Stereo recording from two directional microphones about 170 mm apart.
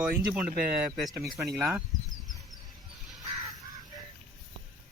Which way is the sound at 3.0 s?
Centre (ahead or behind).